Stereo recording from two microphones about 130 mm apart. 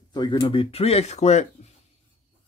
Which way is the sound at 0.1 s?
35° left (ahead or behind).